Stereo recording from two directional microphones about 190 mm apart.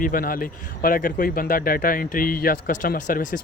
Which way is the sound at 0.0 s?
50° left (ahead or behind).